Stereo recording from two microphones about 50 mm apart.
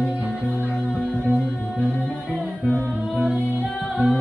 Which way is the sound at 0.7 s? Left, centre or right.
Centre.